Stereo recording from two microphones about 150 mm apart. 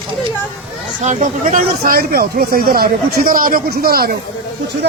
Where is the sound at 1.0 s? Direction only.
55° right (ahead or behind).